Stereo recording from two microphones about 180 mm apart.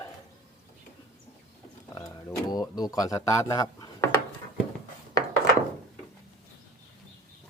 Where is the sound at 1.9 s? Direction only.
25° left (ahead or behind).